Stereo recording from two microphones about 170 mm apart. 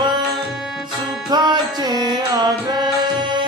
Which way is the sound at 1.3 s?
25° right (ahead or behind).